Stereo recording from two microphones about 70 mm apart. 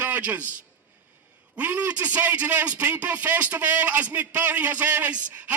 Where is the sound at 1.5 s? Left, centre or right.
Right.